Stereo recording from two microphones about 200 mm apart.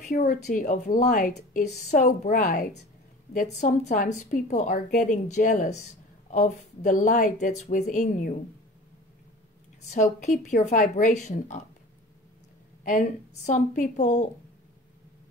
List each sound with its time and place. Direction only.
0.0 s speech: 35° left (ahead or behind)
9.8 s speech: 40° left (ahead or behind)
12.8 s speech: 40° left (ahead or behind)